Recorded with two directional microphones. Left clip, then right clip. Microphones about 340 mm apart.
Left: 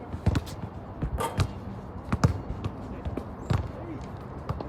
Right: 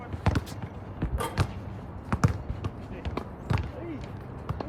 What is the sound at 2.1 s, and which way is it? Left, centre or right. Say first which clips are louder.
Basketball bounce: even; centre.